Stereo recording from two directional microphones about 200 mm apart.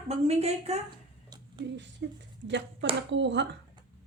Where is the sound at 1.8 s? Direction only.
60° right (ahead or behind).